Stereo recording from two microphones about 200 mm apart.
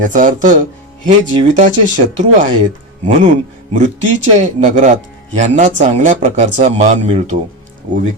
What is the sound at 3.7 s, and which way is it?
Speech, 35° right (ahead or behind).